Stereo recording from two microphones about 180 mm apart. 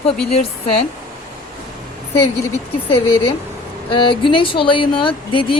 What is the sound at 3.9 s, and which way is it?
A woman's voice, 30° left (ahead or behind).